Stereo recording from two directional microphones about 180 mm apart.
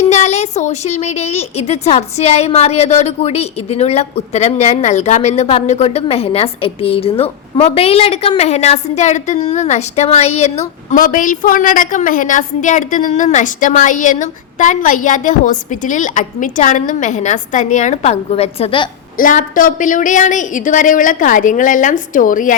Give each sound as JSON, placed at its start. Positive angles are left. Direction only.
{"t": 0.0, "sound": "speech", "side_deg": 40}
{"t": 19.1, "sound": "a woman's voice", "side_deg": 50}